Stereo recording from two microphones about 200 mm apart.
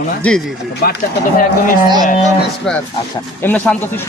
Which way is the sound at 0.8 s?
50° left (ahead or behind).